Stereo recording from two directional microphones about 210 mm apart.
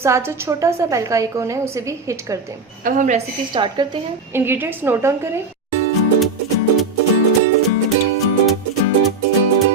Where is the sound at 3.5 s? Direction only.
20° right (ahead or behind).